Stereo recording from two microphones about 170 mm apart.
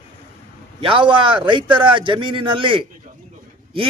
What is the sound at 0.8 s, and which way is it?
A man's voice, 30° right (ahead or behind).